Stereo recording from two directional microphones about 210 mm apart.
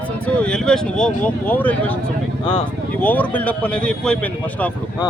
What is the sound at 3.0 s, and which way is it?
A man's voice, 10° left (ahead or behind).